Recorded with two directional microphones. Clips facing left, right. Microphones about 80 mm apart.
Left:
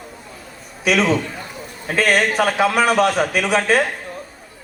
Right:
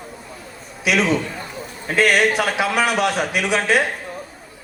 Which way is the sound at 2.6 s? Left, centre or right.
Left.